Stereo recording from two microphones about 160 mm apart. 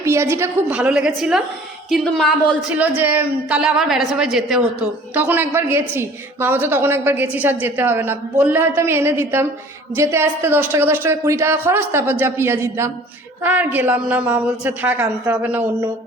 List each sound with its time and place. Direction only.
0.0 s a woman's voice: 15° right (ahead or behind)
0.8 s speech: 5° right (ahead or behind)
2.6 s a woman's voice: 10° right (ahead or behind)